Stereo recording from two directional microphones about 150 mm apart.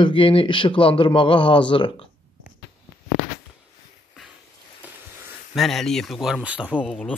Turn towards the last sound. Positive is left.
turn(degrees=-5)  # may be behind; listen again after turning